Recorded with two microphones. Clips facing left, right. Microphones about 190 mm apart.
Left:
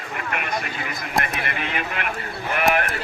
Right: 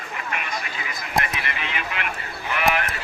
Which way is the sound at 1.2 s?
50° left (ahead or behind).